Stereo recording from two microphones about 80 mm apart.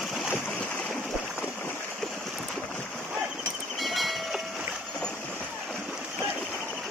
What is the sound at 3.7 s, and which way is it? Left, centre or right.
Train, centre.